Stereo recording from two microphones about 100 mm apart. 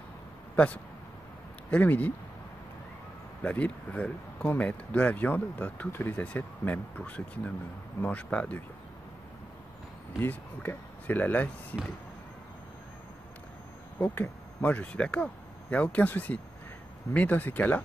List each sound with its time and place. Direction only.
1.7 s speech: 15° left (ahead or behind)
3.4 s speech: 15° left (ahead or behind)
10.2 s speech: 20° left (ahead or behind)
13.9 s speech: 15° left (ahead or behind)